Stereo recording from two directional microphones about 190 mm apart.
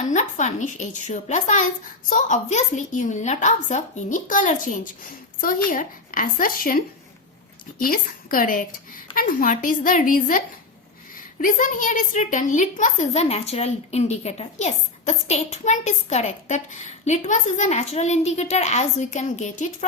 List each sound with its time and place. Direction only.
0.1 s a woman's voice: 40° left (ahead or behind)